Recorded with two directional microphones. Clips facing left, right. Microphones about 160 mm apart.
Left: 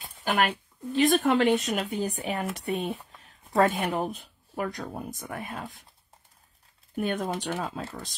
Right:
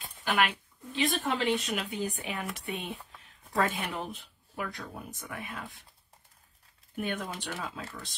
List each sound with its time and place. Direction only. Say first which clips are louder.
0.2 s speech: left 3 dB; 40° left (ahead or behind)
4.0 s speech: left 7 dB; 40° left (ahead or behind)
7.0 s speech: left 6 dB; 40° left (ahead or behind)